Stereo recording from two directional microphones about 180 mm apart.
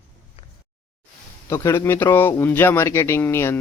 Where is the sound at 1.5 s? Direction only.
15° left (ahead or behind).